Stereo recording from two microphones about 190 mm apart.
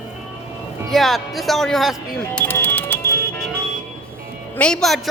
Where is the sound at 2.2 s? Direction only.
10° left (ahead or behind).